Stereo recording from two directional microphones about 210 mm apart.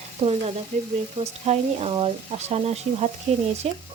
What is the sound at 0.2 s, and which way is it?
Speech, 25° right (ahead or behind).